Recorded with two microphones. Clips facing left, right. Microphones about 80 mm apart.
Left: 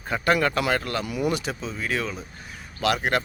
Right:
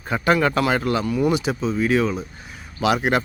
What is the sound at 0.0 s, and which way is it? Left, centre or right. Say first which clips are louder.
A man's voice: right 3 dB; centre.